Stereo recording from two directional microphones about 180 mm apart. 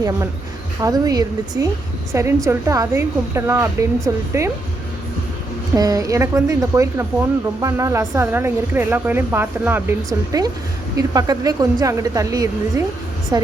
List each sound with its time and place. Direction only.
0.8 s a woman's voice: 20° right (ahead or behind)
5.7 s a woman's voice: 20° right (ahead or behind)